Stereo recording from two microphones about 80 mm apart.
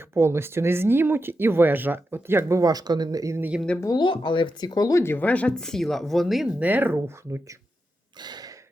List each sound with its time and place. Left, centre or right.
0.1 s speech: right
3.9 s speech: left
4.9 s speech: left
5.1 s speech: centre
6.6 s speech: right
8.2 s throat clearing: right